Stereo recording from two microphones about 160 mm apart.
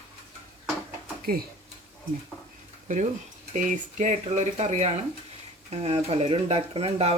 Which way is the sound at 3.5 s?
50° right (ahead or behind).